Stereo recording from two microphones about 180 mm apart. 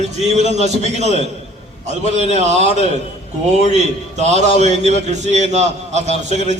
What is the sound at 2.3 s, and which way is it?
Speech, 40° right (ahead or behind).